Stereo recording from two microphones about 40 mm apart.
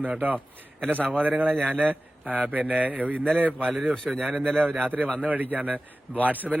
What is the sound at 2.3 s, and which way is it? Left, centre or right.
Speech, right.